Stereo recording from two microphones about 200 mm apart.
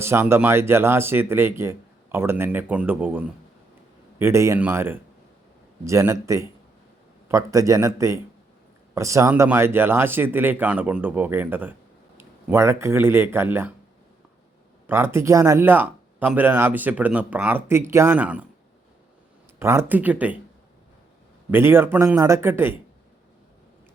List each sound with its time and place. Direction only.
0.0 s speech: 10° right (ahead or behind)
14.8 s speech: 10° right (ahead or behind)
19.5 s speech: 10° right (ahead or behind)
21.5 s speech: 10° right (ahead or behind)